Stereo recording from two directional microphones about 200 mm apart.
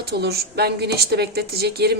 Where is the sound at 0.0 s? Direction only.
55° right (ahead or behind).